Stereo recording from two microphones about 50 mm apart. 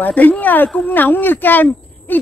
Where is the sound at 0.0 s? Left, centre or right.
Left.